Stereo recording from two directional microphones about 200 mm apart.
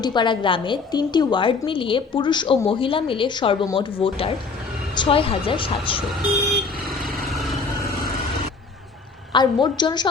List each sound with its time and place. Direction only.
0.0 s a woman's voice: 25° left (ahead or behind)
6.1 s speech: centre (ahead or behind)
7.3 s vehicle: centre (ahead or behind)
9.3 s a woman's voice: 20° left (ahead or behind)